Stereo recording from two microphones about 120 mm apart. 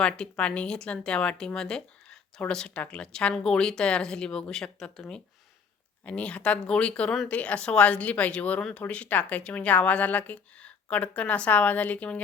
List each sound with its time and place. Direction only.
0.0 s speech: 10° left (ahead or behind)